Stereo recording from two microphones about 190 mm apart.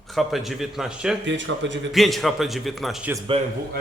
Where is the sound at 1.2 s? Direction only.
75° right (ahead or behind).